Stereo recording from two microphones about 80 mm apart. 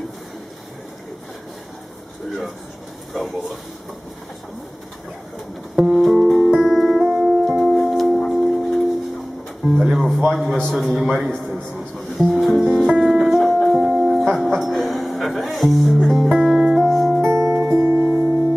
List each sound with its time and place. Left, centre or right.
3.1 s speech: centre
5.8 s music: centre
7.7 s singing bowl: centre
8.6 s music: centre
10.6 s speech: centre
13.0 s music: centre
17.2 s music: right